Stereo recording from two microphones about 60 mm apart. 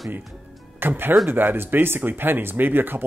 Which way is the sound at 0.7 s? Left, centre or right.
Right.